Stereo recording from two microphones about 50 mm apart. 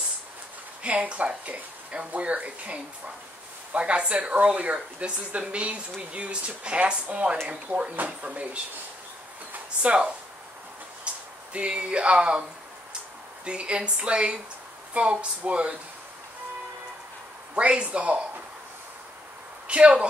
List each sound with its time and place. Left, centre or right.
0.8 s speech: right
9.5 s speech: right
11.1 s a sound: right
11.5 s speech: right
13.5 s speech: right
17.6 s speech: right
19.7 s speech: right